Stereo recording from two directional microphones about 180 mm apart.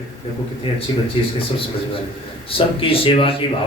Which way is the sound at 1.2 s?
30° left (ahead or behind).